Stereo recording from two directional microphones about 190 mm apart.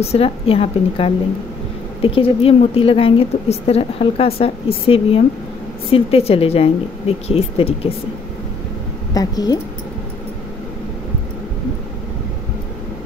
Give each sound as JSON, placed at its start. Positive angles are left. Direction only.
{"t": 0.0, "sound": "a woman's voice", "side_deg": 30}
{"t": 9.1, "sound": "a woman's voice", "side_deg": 20}